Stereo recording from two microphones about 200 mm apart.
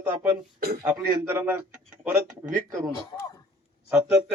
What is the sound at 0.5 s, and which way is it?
Speech, 50° right (ahead or behind).